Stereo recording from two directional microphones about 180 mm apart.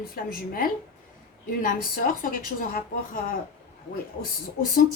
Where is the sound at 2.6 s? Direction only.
50° left (ahead or behind).